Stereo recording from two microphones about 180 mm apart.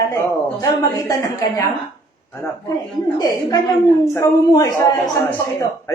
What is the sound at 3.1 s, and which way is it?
A woman's voice, 20° left (ahead or behind).